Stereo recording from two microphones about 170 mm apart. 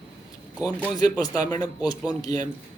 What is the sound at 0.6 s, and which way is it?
Speech, 5° right (ahead or behind).